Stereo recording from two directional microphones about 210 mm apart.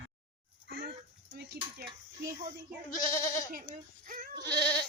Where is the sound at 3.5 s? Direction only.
40° right (ahead or behind).